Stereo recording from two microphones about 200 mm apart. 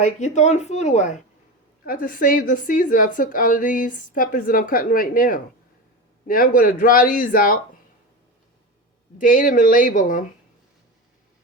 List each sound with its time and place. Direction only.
0.0 s a woman's voice: 35° left (ahead or behind)
9.1 s speech: 40° left (ahead or behind)